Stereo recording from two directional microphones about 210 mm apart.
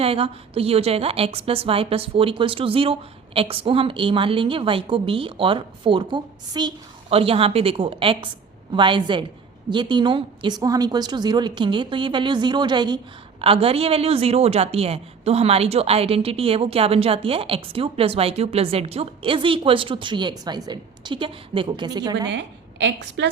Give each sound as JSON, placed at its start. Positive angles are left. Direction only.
{"t": 0.0, "sound": "a woman's voice", "side_deg": -25}
{"t": 22.3, "sound": "a woman's voice", "side_deg": -55}